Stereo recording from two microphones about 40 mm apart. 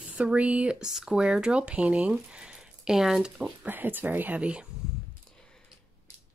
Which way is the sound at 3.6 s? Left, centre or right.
Right.